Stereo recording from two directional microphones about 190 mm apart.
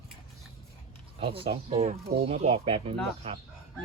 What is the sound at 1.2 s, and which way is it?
Speech, 30° right (ahead or behind).